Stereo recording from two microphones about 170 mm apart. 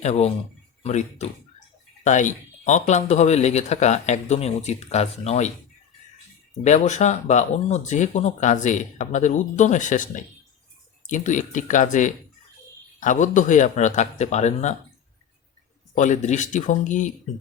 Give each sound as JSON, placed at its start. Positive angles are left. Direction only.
{"t": 0.0, "sound": "speech", "side_deg": 40}
{"t": 6.5, "sound": "speech", "side_deg": 40}
{"t": 16.0, "sound": "speech", "side_deg": 45}